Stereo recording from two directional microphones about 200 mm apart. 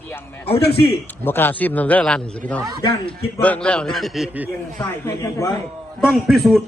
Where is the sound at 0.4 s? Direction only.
30° left (ahead or behind).